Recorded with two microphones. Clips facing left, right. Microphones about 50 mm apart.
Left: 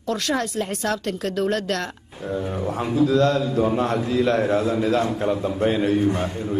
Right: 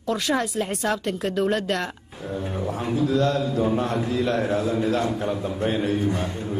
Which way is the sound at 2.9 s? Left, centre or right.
Left.